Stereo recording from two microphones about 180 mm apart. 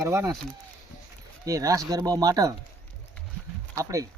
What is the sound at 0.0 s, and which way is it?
Speech, 15° right (ahead or behind).